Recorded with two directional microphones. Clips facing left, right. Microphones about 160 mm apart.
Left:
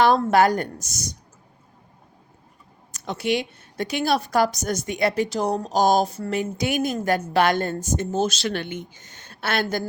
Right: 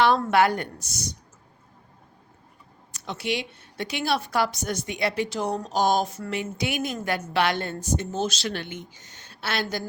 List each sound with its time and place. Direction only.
0.3 s speech: 40° left (ahead or behind)
2.9 s speech: 45° left (ahead or behind)
6.3 s speech: 45° left (ahead or behind)